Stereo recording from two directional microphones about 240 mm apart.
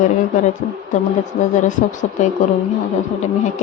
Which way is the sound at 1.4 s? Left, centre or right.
Left.